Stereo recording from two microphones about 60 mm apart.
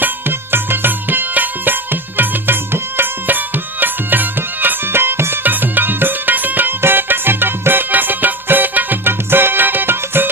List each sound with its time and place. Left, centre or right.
0.0 s music: right